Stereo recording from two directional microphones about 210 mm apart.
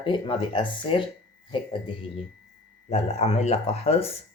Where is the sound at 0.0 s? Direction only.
25° left (ahead or behind).